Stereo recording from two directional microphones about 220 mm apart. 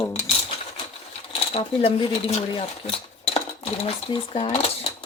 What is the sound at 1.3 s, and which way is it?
Speech, 25° left (ahead or behind).